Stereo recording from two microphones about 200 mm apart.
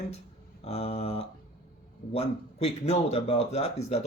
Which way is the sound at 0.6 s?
30° left (ahead or behind).